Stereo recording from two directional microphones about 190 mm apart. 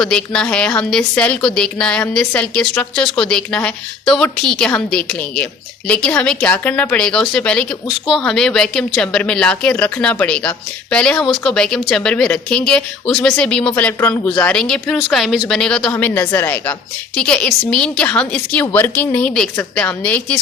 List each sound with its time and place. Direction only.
0.0 s a woman's voice: 5° left (ahead or behind)